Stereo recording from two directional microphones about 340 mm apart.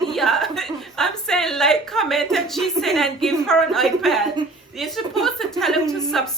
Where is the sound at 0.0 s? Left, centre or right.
Centre.